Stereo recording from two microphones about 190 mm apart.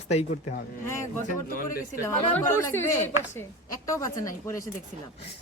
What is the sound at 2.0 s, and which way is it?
A woman's voice, 15° left (ahead or behind).